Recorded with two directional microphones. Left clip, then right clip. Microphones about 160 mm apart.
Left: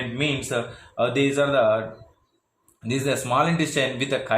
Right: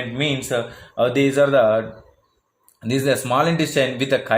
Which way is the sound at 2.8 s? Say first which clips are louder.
Right 5 dB; 45° right (ahead or behind).